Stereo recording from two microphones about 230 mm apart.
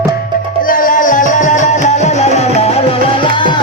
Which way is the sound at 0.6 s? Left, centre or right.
Left.